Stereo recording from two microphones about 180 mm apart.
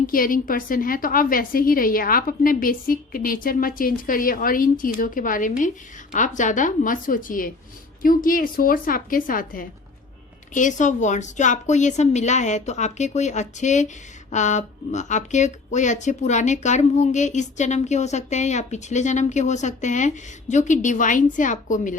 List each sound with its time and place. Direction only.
0.1 s a woman's voice: 50° left (ahead or behind)